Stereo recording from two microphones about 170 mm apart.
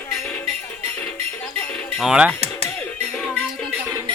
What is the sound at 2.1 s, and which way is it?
Speech, 5° right (ahead or behind).